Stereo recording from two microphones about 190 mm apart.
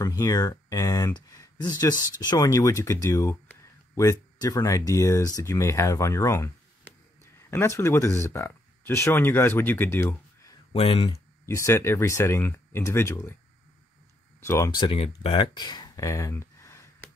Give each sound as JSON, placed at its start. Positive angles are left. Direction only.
{"t": 0.0, "sound": "speech", "side_deg": 20}
{"t": 7.5, "sound": "speech", "side_deg": 15}
{"t": 10.7, "sound": "speech", "side_deg": 30}
{"t": 11.4, "sound": "speech", "side_deg": 15}
{"t": 14.4, "sound": "speech", "side_deg": 15}